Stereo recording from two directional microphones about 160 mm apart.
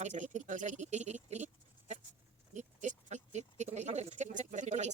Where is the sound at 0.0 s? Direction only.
50° right (ahead or behind).